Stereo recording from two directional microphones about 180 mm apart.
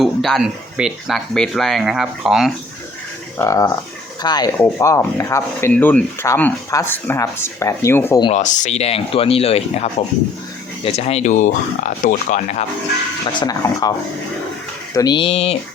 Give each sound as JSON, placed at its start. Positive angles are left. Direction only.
{"t": 0.0, "sound": "speech", "side_deg": 0}
{"t": 3.3, "sound": "speech", "side_deg": 15}
{"t": 8.4, "sound": "speech", "side_deg": 45}
{"t": 13.4, "sound": "speech", "side_deg": 20}
{"t": 14.9, "sound": "speech", "side_deg": 25}